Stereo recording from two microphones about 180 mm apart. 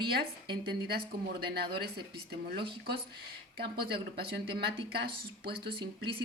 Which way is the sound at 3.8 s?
60° right (ahead or behind).